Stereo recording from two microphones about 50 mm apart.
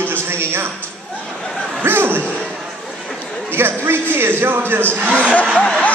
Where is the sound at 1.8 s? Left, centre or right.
Right.